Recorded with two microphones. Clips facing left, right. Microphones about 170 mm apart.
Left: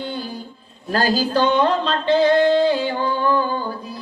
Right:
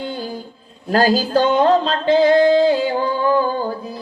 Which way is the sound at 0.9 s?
45° right (ahead or behind).